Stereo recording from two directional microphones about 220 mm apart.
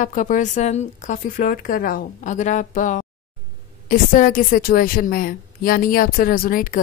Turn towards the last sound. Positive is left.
turn(degrees=40)  # may be behind; listen again after turning